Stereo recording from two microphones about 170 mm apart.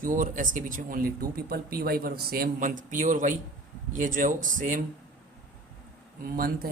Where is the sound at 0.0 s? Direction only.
50° right (ahead or behind).